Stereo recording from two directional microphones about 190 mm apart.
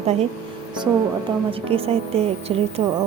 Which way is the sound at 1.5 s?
30° right (ahead or behind).